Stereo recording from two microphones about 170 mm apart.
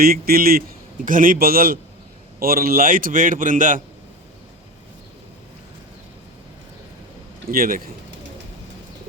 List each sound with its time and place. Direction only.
0.0 s a man's voice: 60° right (ahead or behind)
7.5 s a man's voice: 60° right (ahead or behind)